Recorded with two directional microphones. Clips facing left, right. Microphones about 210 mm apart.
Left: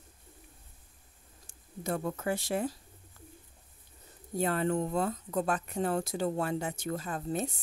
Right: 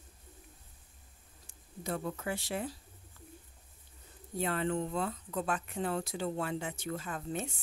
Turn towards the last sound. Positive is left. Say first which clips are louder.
# left 4 dB
turn(degrees=35)  # may be behind; listen again after turning